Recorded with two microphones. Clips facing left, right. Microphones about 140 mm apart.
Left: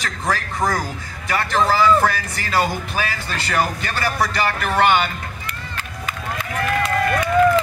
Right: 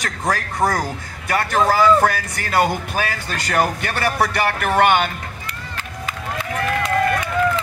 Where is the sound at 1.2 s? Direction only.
55° right (ahead or behind).